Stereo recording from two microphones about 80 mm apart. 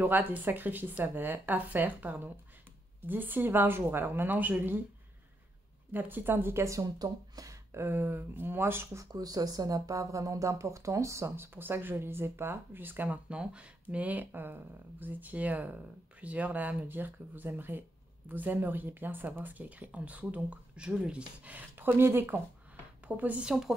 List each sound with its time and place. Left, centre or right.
0.0 s speech: right
5.9 s speech: right
7.0 s speech: right
7.7 s speech: right
9.0 s speech: right; by 23.5 s centre